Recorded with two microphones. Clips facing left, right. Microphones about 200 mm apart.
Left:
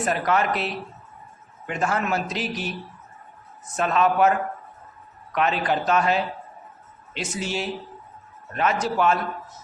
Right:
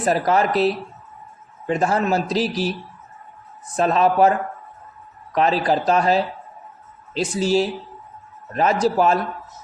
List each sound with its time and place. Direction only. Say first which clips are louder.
0.0 s a man's voice: right 4 dB; 35° right (ahead or behind)
3.8 s a man's voice: right 4 dB; 35° right (ahead or behind)